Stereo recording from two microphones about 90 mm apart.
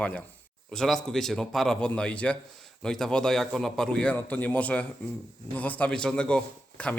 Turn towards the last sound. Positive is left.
turn(degrees=15)  # may be behind; listen again after turning